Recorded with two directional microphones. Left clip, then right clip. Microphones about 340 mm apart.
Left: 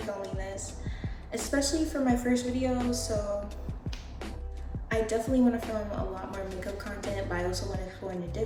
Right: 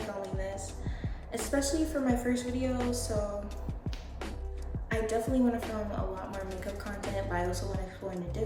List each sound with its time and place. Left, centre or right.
0.0 s music: centre
4.9 s speech: centre